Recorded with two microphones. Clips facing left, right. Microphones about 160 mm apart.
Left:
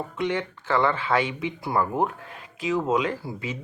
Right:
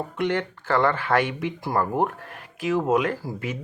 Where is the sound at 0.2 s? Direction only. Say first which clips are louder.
Right 2 dB; 60° right (ahead or behind).